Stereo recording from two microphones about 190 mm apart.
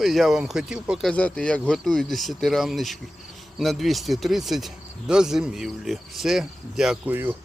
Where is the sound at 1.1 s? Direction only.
5° left (ahead or behind).